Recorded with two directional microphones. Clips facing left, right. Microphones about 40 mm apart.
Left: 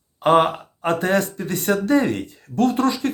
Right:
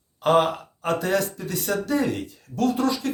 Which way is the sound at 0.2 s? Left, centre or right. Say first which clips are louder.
Left 3 dB; left.